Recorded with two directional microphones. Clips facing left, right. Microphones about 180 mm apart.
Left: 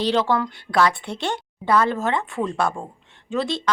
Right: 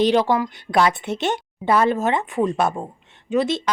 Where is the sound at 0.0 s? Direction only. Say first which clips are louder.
Right 3 dB; 15° right (ahead or behind).